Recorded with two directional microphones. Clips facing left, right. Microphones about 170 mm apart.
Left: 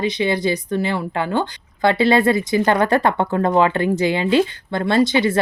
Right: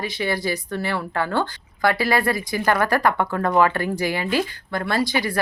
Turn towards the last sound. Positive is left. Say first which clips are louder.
# left 6 dB
turn(degrees=25)  # may be behind; listen again after turning